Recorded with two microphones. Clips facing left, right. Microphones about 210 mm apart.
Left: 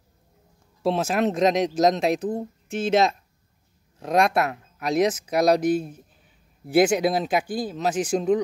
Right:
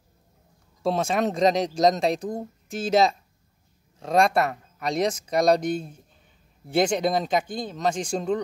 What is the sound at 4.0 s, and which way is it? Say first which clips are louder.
Speech: even; centre (ahead or behind).